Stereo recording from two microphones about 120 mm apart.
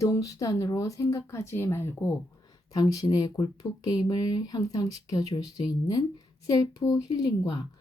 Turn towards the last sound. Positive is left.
turn(degrees=30)  # may be behind; listen again after turning